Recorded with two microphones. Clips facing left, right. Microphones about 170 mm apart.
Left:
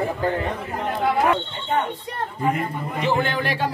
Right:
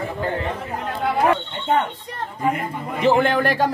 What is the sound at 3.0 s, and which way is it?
Speech, 45° right (ahead or behind).